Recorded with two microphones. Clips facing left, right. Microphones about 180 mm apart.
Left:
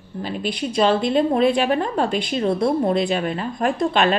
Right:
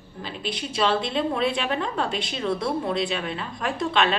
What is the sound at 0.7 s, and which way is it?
A woman's voice, 40° left (ahead or behind).